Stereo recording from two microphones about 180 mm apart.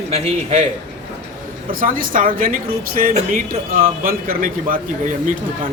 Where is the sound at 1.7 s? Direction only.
50° right (ahead or behind).